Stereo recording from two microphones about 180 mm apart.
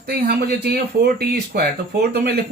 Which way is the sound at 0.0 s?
60° right (ahead or behind).